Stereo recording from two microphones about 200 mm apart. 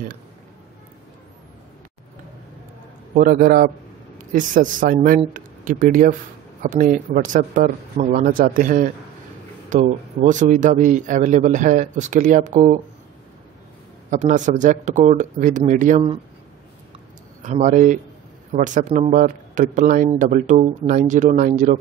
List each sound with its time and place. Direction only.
3.2 s a man's voice: 45° right (ahead or behind)
14.1 s a man's voice: 35° right (ahead or behind)
17.4 s a man's voice: 40° right (ahead or behind)